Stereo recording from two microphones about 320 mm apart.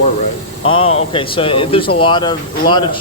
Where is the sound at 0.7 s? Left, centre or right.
Centre.